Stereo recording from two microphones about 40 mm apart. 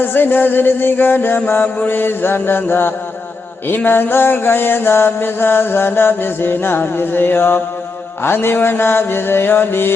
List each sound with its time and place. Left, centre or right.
0.0 s mantra: left
1.9 s mantra: left